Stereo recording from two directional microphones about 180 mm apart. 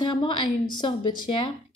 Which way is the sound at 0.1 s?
25° left (ahead or behind).